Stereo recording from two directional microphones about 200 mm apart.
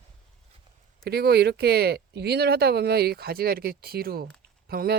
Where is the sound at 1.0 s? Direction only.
50° right (ahead or behind).